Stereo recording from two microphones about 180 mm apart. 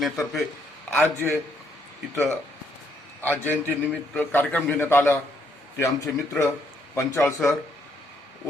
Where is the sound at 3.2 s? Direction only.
10° left (ahead or behind).